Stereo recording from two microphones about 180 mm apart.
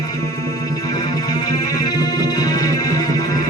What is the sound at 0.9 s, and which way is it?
Music, 20° left (ahead or behind).